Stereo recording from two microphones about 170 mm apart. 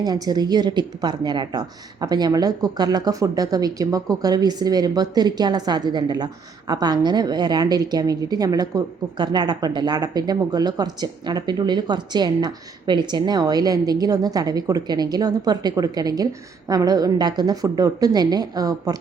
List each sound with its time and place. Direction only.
0.0 s a woman's voice: 25° right (ahead or behind)